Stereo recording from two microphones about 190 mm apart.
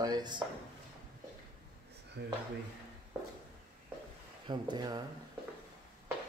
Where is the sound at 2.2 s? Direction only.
60° right (ahead or behind).